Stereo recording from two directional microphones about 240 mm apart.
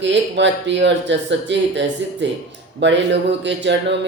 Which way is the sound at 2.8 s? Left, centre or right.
Right.